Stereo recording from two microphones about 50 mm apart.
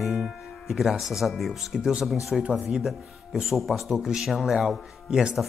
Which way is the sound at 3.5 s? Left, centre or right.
Centre.